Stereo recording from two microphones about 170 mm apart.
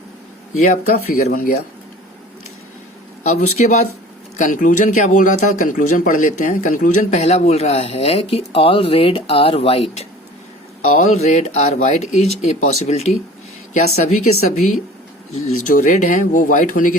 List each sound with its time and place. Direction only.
0.6 s speech: 50° left (ahead or behind)
3.2 s speech: 45° left (ahead or behind)
10.9 s speech: 40° left (ahead or behind)
15.4 s speech: 50° left (ahead or behind)